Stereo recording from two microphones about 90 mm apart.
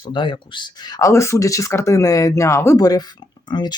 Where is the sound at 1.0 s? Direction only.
30° left (ahead or behind).